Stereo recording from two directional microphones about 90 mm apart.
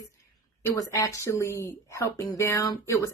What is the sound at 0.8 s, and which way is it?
Speech, 35° left (ahead or behind).